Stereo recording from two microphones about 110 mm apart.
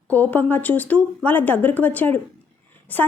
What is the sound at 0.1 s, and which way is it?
A woman's voice, 15° left (ahead or behind).